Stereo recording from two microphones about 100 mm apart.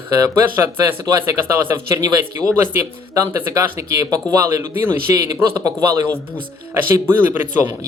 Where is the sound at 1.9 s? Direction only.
40° right (ahead or behind).